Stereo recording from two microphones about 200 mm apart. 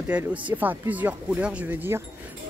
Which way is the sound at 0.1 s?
5° right (ahead or behind).